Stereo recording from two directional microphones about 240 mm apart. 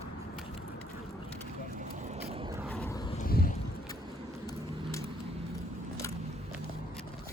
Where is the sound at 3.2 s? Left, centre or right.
Left.